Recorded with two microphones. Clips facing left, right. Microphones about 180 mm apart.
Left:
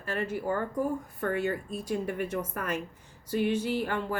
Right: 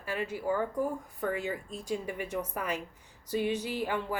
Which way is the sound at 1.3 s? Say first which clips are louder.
Left 4 dB; 65° left (ahead or behind).